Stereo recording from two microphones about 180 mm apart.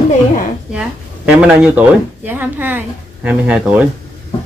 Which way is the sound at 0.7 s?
5° right (ahead or behind).